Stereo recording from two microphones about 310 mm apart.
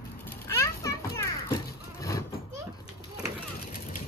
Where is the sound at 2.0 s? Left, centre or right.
Centre.